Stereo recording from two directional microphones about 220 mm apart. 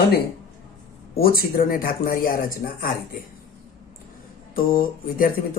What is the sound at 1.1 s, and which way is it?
Speech, 40° left (ahead or behind).